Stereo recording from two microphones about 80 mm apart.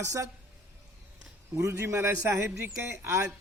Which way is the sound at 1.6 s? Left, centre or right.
Right.